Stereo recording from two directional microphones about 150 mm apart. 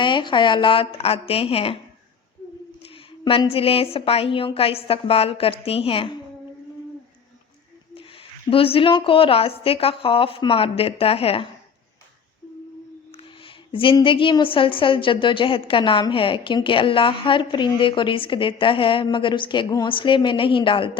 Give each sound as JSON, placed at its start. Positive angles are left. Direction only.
{"t": 0.0, "sound": "a woman's voice", "side_deg": 30}
{"t": 2.8, "sound": "a woman's voice", "side_deg": 40}
{"t": 7.9, "sound": "a woman's voice", "side_deg": 35}
{"t": 13.1, "sound": "a woman's voice", "side_deg": 35}